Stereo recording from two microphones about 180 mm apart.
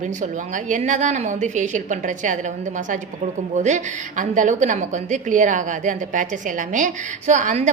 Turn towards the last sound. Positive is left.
turn(degrees=-45)  # may be behind; listen again after turning